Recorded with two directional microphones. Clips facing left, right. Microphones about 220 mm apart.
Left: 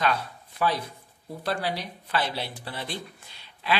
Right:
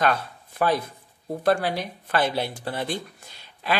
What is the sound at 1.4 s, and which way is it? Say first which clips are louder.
Speech: right 7 dB; 50° right (ahead or behind).